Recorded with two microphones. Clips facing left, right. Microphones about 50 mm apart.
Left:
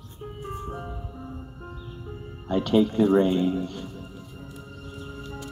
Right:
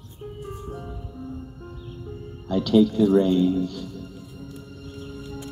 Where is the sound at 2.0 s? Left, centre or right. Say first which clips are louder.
Even; left.